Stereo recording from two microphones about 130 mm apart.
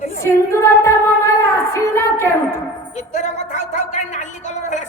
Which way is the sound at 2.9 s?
65° left (ahead or behind).